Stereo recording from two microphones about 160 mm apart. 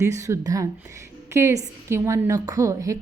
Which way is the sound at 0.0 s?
20° right (ahead or behind).